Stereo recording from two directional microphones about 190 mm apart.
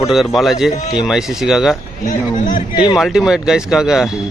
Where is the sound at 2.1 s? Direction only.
45° left (ahead or behind).